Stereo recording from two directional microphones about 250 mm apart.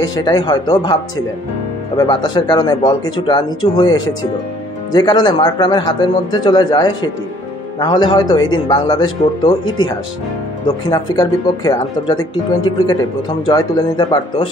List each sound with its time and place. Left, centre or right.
0.0 s a man's voice: centre
2.0 s a man's voice: centre
4.9 s a man's voice: centre